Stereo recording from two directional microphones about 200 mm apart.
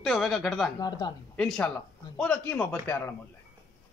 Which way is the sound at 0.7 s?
20° left (ahead or behind).